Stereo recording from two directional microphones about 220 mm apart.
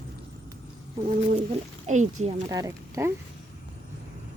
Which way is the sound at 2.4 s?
15° right (ahead or behind).